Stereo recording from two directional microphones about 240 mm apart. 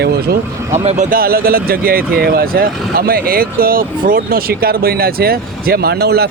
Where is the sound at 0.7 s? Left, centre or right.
Right.